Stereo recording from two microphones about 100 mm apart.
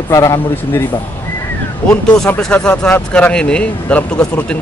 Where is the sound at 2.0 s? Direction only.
10° left (ahead or behind).